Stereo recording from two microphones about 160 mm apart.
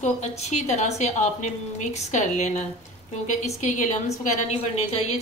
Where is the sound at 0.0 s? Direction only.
45° left (ahead or behind).